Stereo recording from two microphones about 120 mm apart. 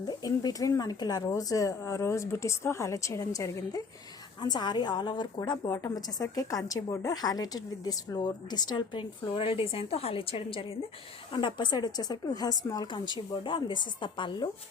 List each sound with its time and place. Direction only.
0.2 s a woman's voice: 30° left (ahead or behind)
13.1 s a woman's voice: 40° left (ahead or behind)